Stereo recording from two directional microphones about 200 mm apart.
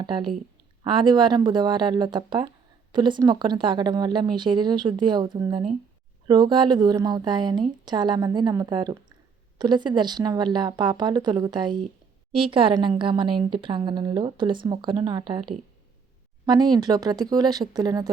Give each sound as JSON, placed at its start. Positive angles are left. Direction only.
{"t": 0.0, "sound": "a woman's voice", "side_deg": -25}